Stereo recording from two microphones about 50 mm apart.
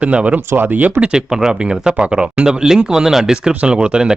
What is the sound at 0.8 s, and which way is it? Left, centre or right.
Speech, right.